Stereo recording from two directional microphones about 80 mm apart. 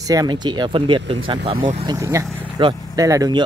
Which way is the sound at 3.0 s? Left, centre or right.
Right.